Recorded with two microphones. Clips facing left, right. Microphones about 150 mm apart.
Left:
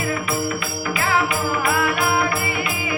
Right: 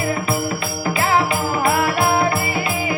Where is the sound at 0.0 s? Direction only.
30° right (ahead or behind).